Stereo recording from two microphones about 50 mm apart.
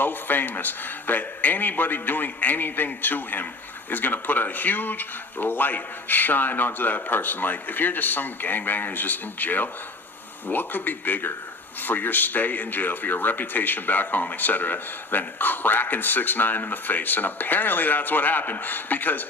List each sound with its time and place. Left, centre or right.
0.0 s speech: left